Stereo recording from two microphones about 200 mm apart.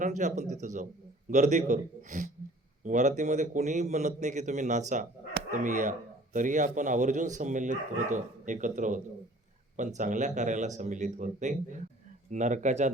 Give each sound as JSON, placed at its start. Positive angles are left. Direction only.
{"t": 0.0, "sound": "a man's voice", "side_deg": -40}